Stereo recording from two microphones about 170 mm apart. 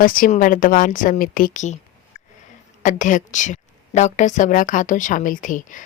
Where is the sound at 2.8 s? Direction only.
45° left (ahead or behind).